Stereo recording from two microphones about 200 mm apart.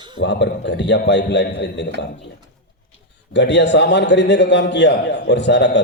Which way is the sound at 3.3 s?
60° left (ahead or behind).